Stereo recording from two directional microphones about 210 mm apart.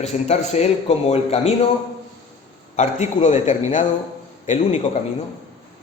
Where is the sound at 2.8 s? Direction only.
35° left (ahead or behind).